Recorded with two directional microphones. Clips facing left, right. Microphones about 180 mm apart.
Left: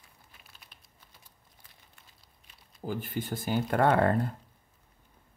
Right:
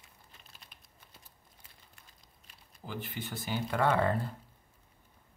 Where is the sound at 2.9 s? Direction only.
50° left (ahead or behind).